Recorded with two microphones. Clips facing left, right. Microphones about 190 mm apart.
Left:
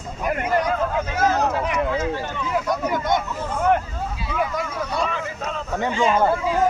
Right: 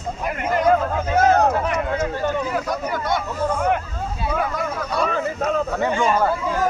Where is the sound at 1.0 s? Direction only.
55° right (ahead or behind).